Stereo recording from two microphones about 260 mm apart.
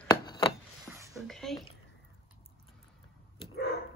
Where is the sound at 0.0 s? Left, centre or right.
Centre.